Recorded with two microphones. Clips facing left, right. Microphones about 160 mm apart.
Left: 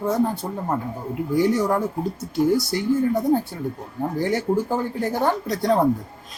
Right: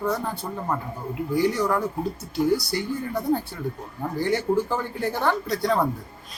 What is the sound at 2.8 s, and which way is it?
Speech, 15° left (ahead or behind).